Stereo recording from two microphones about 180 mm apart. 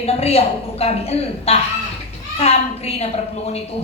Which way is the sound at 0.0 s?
35° left (ahead or behind).